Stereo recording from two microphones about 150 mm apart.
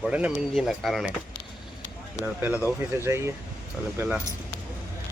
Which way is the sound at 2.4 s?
10° right (ahead or behind).